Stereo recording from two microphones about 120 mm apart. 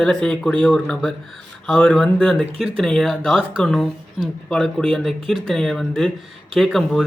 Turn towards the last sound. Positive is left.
turn(degrees=0)  # may be behind; listen again after turning